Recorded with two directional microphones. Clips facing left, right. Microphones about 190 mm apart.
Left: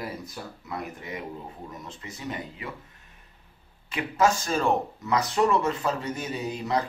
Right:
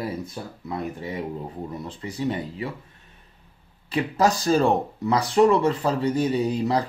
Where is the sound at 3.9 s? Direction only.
35° right (ahead or behind).